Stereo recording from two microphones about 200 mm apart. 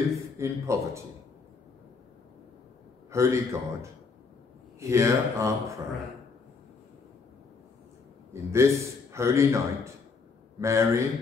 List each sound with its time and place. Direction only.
0.4 s a man's voice: 15° right (ahead or behind)
3.1 s a man's voice: 15° right (ahead or behind)
8.3 s a man's voice: 15° right (ahead or behind)